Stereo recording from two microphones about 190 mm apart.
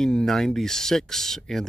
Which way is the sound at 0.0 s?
5° left (ahead or behind).